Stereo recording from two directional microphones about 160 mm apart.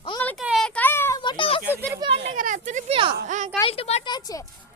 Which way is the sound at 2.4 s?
50° right (ahead or behind).